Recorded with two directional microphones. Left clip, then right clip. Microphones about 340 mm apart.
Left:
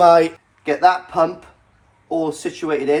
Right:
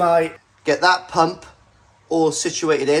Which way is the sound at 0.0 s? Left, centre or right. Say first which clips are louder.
Left 5 dB; centre.